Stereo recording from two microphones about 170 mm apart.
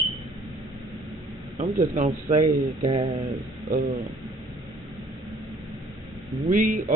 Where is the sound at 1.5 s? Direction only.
45° right (ahead or behind).